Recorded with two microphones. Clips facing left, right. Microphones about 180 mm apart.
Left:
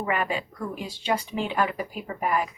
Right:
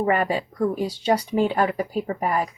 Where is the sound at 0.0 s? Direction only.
40° right (ahead or behind).